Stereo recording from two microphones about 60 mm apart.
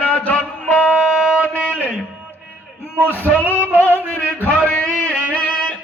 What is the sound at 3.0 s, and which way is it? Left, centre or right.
Music, left.